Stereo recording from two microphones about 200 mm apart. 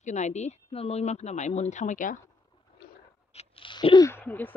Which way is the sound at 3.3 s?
25° left (ahead or behind).